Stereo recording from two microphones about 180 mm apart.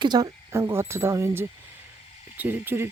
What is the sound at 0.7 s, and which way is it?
Speech, 15° right (ahead or behind).